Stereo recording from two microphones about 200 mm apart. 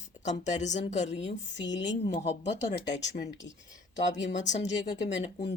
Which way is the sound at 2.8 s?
60° left (ahead or behind).